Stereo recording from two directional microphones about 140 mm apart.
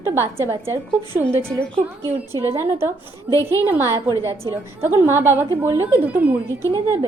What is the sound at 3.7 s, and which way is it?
A woman's voice, 20° right (ahead or behind).